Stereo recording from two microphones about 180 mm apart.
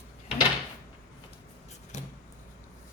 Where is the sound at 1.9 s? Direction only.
40° left (ahead or behind).